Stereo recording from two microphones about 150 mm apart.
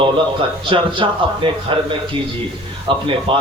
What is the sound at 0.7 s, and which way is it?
Speech, 40° right (ahead or behind).